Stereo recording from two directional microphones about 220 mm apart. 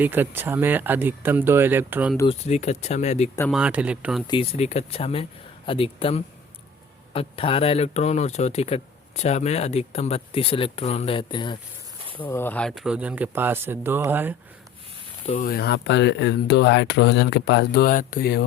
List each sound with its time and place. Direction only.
0.0 s speech: 10° right (ahead or behind)
2.1 s speech: 25° left (ahead or behind)
3.5 s speech: 5° right (ahead or behind)
4.3 s speech: 25° left (ahead or behind)
12.1 s speech: 10° left (ahead or behind); by 14.3 s 10° right (ahead or behind)
15.4 s speech: 45° left (ahead or behind)